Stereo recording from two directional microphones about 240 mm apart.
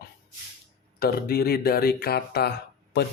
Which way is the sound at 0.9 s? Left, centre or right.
Left.